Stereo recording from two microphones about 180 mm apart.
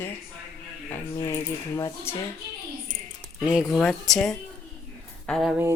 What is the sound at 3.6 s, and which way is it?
Speech, 5° left (ahead or behind).